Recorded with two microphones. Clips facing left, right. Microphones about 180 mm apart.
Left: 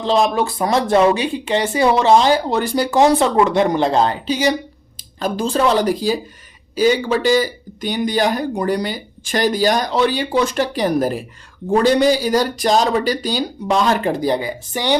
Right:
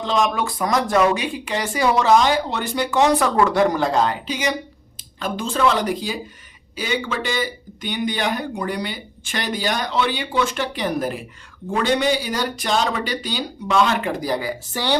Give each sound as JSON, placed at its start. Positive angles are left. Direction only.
{"t": 0.0, "sound": "speech", "side_deg": 30}
{"t": 3.2, "sound": "speech", "side_deg": 25}